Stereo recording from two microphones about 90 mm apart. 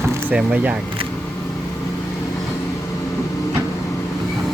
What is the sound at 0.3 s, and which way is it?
Speech, 15° right (ahead or behind).